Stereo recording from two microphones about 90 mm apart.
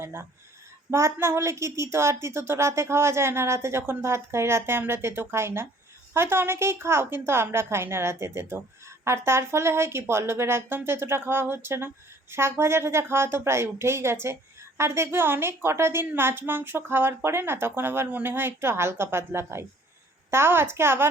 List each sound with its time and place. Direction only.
0.0 s a woman's voice: 25° right (ahead or behind)